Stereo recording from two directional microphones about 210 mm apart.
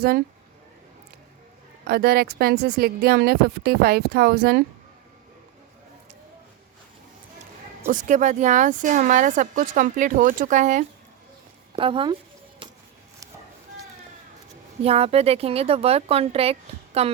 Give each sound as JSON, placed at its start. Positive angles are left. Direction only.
{"t": 1.9, "sound": "speech", "side_deg": -45}
{"t": 7.9, "sound": "speech", "side_deg": -40}
{"t": 11.8, "sound": "speech", "side_deg": -25}
{"t": 14.8, "sound": "speech", "side_deg": -30}